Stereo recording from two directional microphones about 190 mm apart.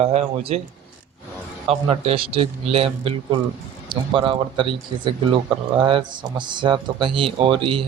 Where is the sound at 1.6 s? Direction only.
30° right (ahead or behind).